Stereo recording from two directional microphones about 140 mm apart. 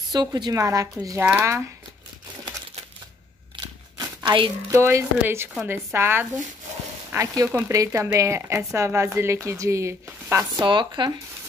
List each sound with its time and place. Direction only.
0.1 s speech: 30° right (ahead or behind)
3.5 s crumpling: 35° right (ahead or behind)
4.6 s speech: 20° right (ahead or behind)
10.5 s speech: 35° right (ahead or behind)